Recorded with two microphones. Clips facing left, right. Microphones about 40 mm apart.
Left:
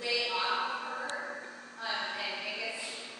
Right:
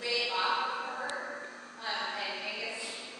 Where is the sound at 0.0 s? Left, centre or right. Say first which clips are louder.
Right 1 dB; centre.